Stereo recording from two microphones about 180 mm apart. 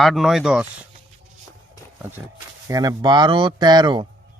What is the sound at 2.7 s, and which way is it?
Speech, 20° right (ahead or behind).